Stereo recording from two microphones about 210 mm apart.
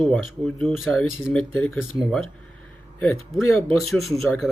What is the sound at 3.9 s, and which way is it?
Speech, centre (ahead or behind).